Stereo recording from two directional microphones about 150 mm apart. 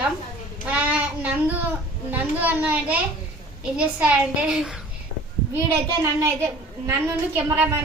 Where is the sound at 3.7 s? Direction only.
10° right (ahead or behind).